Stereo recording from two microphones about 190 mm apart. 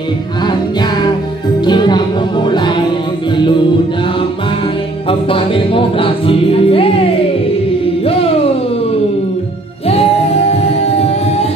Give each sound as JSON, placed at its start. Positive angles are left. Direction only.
{"t": 1.6, "sound": "music", "side_deg": 25}
{"t": 5.3, "sound": "music", "side_deg": 30}